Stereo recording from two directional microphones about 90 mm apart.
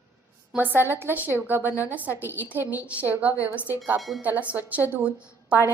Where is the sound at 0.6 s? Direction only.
25° right (ahead or behind).